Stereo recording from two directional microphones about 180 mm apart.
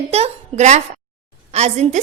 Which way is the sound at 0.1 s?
35° right (ahead or behind).